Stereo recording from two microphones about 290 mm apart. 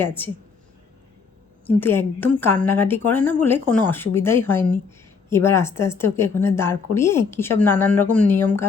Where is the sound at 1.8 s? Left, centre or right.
Centre.